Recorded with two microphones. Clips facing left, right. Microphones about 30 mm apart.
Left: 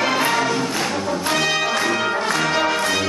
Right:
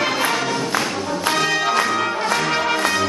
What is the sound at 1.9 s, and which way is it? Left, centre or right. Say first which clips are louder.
Brass instrument: even; centre.